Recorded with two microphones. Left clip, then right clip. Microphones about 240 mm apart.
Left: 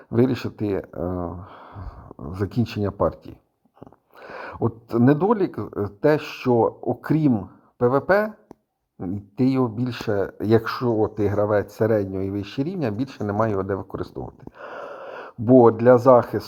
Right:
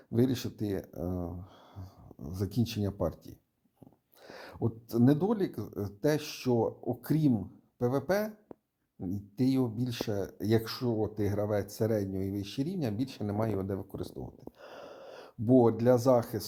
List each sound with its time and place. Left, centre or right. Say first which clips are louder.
0.1 s speech: left 9 dB; centre